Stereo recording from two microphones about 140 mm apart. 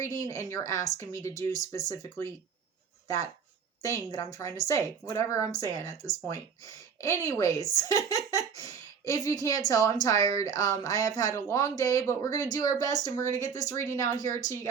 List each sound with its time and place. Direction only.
0.0 s speech: 20° left (ahead or behind)
3.8 s speech: 25° left (ahead or behind)